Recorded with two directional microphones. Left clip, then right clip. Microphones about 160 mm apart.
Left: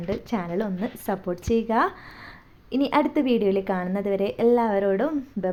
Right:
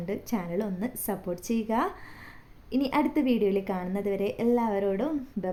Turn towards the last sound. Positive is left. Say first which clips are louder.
# left 5 dB
turn(degrees=20)  # may be behind; listen again after turning